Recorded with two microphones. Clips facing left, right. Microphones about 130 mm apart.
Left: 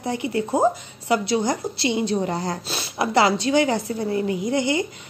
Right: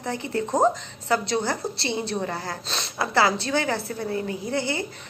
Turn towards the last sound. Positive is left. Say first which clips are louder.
# left 5 dB
turn(degrees=15)  # may be behind; listen again after turning